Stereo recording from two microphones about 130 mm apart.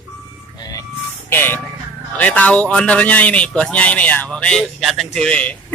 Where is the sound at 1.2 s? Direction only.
15° left (ahead or behind).